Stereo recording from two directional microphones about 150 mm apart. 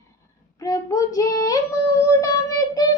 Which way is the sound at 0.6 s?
20° left (ahead or behind).